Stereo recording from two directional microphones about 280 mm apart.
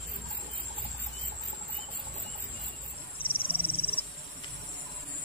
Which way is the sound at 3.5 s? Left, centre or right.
Centre.